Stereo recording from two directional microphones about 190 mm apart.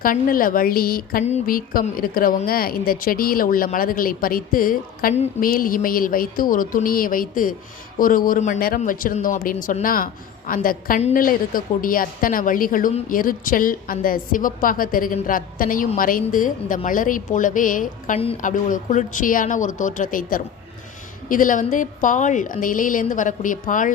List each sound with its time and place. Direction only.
0.0 s a woman's voice: 45° left (ahead or behind)